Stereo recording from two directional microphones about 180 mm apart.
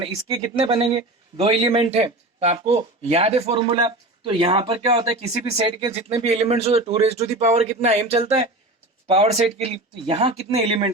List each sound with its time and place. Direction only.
0.0 s speech: 30° right (ahead or behind)